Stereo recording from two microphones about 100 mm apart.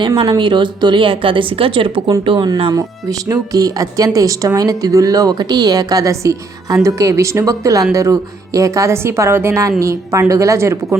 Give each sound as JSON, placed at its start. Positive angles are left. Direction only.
{"t": 0.3, "sound": "a woman's voice", "side_deg": -55}
{"t": 2.7, "sound": "speech", "side_deg": -35}